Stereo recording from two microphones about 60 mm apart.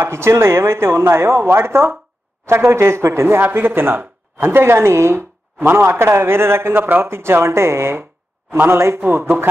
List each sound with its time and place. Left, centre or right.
0.0 s speech: right